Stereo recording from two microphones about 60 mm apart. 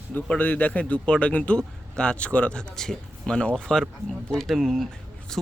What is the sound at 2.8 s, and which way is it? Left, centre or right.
Speech, centre.